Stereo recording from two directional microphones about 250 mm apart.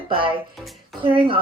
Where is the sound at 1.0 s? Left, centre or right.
Right.